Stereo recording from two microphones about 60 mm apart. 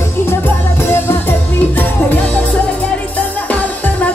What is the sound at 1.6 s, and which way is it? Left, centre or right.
Music, left.